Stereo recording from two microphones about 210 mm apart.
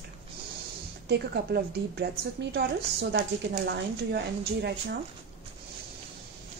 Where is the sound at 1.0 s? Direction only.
50° right (ahead or behind).